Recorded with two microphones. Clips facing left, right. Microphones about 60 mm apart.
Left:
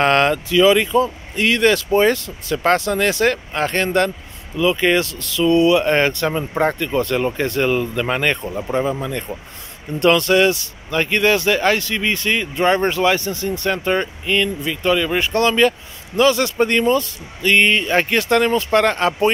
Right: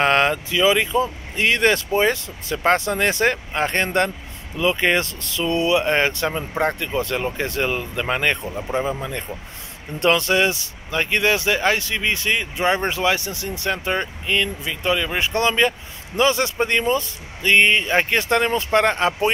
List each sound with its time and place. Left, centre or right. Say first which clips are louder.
0.0 s speech: left 2 dB; centre; by 1.9 s right
1.9 s speech: left 4 dB; centre
5.9 s speech: left 3 dB; centre
6.8 s speech: left 4 dB; centre
8.5 s speech: left 3 dB; centre
8.7 s speech: left 3 dB; centre
16.5 s speech: left 4 dB; centre